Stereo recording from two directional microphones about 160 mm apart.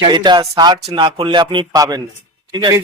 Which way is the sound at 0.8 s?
35° right (ahead or behind).